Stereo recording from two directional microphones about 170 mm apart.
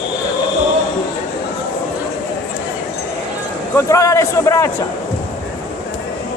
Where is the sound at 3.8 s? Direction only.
20° left (ahead or behind).